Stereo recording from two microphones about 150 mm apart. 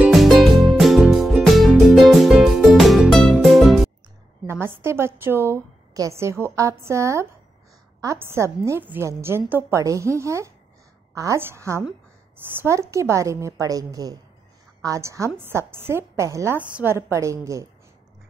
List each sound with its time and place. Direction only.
0.0 s music: centre (ahead or behind)
4.5 s a woman's voice: 15° right (ahead or behind)